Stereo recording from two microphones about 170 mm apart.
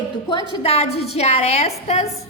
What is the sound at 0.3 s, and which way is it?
A woman's voice, 30° left (ahead or behind).